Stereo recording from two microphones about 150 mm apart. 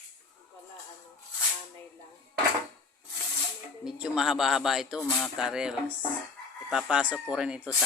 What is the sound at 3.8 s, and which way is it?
A man's voice, 5° right (ahead or behind).